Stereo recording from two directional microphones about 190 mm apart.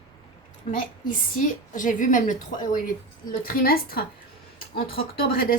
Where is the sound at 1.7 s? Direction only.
45° left (ahead or behind).